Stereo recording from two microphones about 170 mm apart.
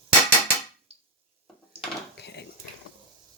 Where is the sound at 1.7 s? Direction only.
35° right (ahead or behind).